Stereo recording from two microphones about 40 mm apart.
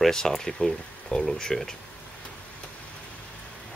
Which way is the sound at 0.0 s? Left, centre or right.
Centre.